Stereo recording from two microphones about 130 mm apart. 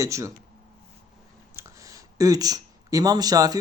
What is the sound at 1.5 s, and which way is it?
Speech, 25° right (ahead or behind).